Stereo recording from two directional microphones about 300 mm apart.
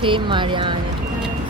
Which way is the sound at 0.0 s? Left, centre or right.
Centre.